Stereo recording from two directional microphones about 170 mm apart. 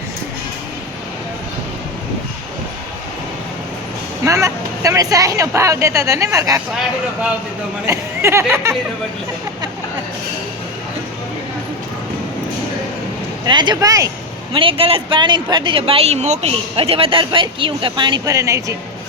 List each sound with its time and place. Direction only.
4.2 s a woman's voice: 20° right (ahead or behind)
7.9 s speech: 15° right (ahead or behind)
13.4 s a woman's voice: 25° right (ahead or behind)
14.5 s speech: 30° right (ahead or behind)